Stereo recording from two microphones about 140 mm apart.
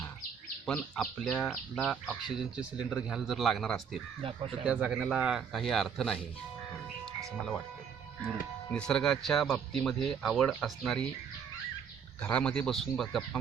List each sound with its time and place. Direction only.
0.6 s speech: 5° left (ahead or behind)
4.2 s speech: 40° right (ahead or behind)
4.6 s speech: 10° right (ahead or behind)
8.9 s speech: 5° left (ahead or behind)
12.2 s speech: 10° left (ahead or behind)